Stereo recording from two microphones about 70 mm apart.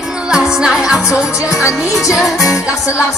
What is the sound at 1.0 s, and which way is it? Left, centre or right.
Music, left.